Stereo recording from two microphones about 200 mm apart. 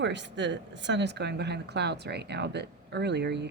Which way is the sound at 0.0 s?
60° right (ahead or behind).